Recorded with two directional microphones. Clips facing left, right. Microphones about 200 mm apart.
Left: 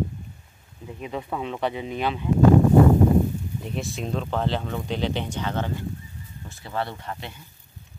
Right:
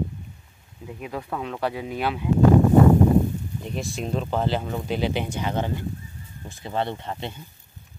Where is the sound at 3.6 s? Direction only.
Centre (ahead or behind); by 7.3 s 25° right (ahead or behind).